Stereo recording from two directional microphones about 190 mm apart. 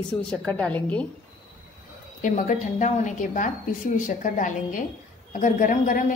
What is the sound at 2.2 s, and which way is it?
A woman's voice, 40° left (ahead or behind).